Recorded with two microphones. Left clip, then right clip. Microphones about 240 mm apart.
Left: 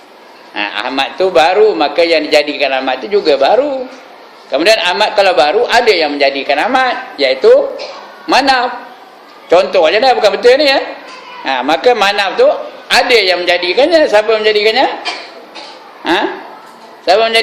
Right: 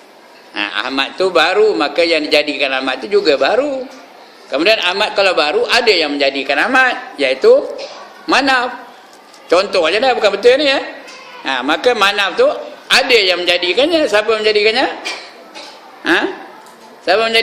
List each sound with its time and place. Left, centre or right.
0.5 s a man's voice: centre
16.0 s a man's voice: right